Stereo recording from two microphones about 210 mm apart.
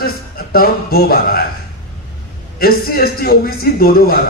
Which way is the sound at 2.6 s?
45° left (ahead or behind).